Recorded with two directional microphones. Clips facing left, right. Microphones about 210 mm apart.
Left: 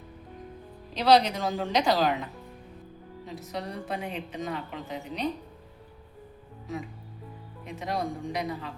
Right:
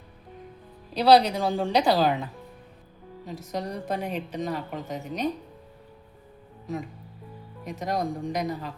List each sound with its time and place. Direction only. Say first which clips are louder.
0.9 s a woman's voice: right 3 dB; 35° right (ahead or behind)
3.5 s a woman's voice: right 4 dB; 40° right (ahead or behind)
7.6 s a woman's voice: right 3 dB; 40° right (ahead or behind)